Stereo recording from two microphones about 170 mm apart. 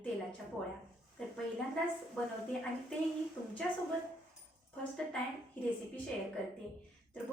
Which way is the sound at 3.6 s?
10° left (ahead or behind).